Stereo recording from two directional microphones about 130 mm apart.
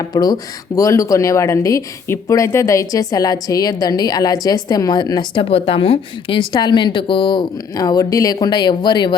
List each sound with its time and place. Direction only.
0.0 s speech: 30° left (ahead or behind)